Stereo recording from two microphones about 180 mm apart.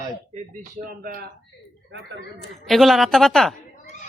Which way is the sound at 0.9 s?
55° right (ahead or behind).